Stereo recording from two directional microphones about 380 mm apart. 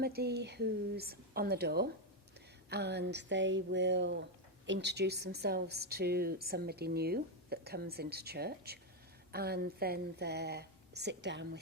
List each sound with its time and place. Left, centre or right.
0.0 s speech: right